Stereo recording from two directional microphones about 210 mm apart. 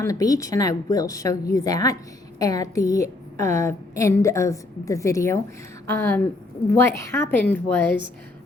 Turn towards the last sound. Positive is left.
turn(degrees=10)  # may be behind; listen again after turning